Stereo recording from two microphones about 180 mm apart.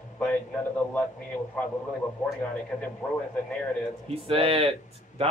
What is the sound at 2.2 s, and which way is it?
Speech, 10° left (ahead or behind).